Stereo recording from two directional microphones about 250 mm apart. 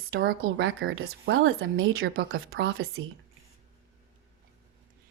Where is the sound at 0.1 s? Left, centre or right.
Right.